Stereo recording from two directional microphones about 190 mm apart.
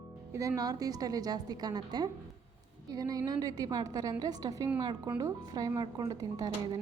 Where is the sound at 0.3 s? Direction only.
15° right (ahead or behind).